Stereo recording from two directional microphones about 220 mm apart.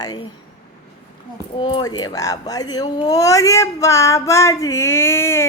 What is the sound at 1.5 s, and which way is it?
Female singing, 20° left (ahead or behind).